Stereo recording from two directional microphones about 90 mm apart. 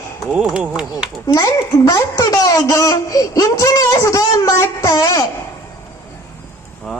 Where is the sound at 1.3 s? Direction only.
40° left (ahead or behind).